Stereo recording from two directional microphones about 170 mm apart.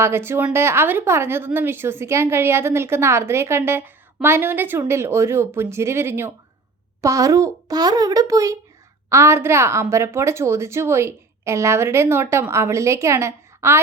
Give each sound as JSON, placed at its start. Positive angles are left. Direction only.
{"t": 0.0, "sound": "a child's voice", "side_deg": -15}